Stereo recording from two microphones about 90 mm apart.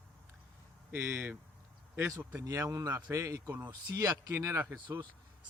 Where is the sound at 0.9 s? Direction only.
20° right (ahead or behind).